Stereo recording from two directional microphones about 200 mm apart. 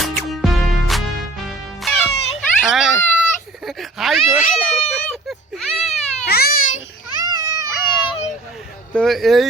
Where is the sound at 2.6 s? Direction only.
5° right (ahead or behind).